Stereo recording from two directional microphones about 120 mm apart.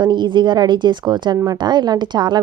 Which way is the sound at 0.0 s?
40° right (ahead or behind).